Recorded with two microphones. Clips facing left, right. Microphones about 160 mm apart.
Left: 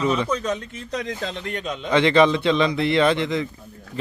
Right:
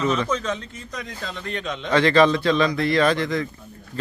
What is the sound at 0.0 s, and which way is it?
Speech, 10° left (ahead or behind).